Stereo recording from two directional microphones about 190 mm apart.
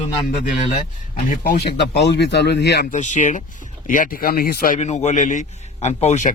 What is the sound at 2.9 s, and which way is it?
Speech, 40° left (ahead or behind).